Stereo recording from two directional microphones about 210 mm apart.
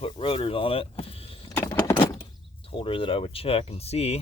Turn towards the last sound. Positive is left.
turn(degrees=30)  # may be behind; listen again after turning